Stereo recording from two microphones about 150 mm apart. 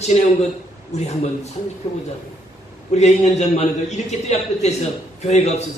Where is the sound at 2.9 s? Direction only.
45° left (ahead or behind).